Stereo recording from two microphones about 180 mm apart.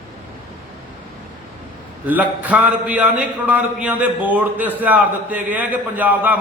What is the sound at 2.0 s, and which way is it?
A man's voice, 10° right (ahead or behind).